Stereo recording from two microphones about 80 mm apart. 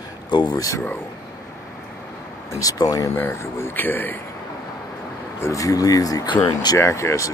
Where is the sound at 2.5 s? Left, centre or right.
Left.